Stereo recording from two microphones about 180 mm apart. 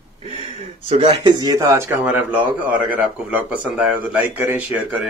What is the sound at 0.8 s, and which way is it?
Speech, 35° right (ahead or behind).